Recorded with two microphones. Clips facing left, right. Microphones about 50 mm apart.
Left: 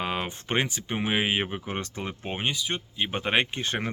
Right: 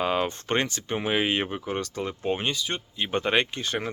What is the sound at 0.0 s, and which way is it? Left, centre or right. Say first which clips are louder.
Speech: right 5 dB; centre.